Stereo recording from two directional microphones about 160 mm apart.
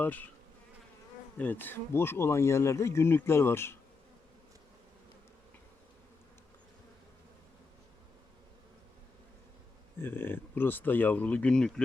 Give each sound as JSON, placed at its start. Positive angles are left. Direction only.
{"t": 0.0, "sound": "bee", "side_deg": 10}
{"t": 1.4, "sound": "speech", "side_deg": 10}
{"t": 10.0, "sound": "speech", "side_deg": 15}